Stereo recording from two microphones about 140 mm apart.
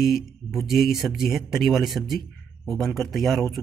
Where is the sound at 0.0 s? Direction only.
Centre (ahead or behind).